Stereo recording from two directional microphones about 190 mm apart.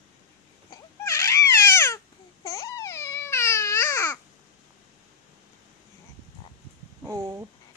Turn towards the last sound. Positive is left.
turn(degrees=-15)  # may be behind; listen again after turning